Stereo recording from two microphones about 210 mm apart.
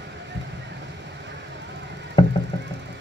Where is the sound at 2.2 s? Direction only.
20° left (ahead or behind).